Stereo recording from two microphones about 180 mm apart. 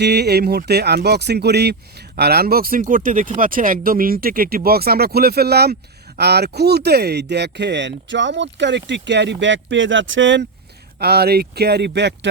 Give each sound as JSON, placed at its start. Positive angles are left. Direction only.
{"t": 0.0, "sound": "speech", "side_deg": -65}
{"t": 11.0, "sound": "speech", "side_deg": -60}